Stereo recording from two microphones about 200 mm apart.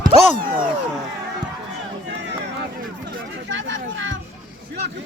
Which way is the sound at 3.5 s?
70° right (ahead or behind).